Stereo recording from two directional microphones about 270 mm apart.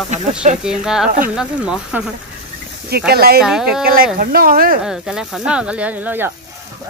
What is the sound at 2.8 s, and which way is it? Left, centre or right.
Speech, right.